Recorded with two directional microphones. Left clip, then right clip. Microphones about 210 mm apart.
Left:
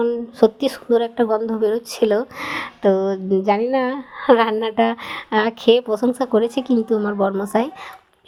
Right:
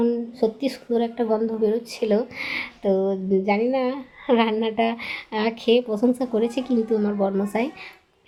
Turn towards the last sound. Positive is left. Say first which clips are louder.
# left 4 dB
turn(degrees=25)  # may be behind; listen again after turning